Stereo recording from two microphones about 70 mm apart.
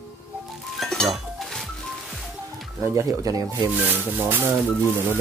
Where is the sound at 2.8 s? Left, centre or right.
Right.